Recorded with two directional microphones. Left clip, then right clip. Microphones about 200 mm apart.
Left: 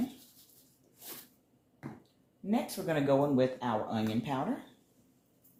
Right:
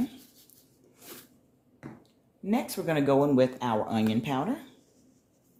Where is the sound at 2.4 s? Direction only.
55° right (ahead or behind).